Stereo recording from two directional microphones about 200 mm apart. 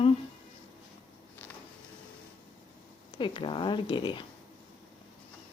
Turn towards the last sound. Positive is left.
turn(degrees=25)  # may be behind; listen again after turning